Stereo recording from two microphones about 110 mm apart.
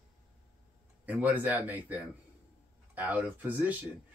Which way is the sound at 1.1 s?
15° right (ahead or behind).